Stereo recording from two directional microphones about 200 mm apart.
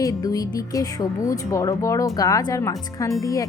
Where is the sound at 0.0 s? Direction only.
15° left (ahead or behind).